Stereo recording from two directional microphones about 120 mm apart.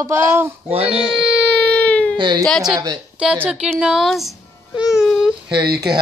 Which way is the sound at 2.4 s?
Centre (ahead or behind).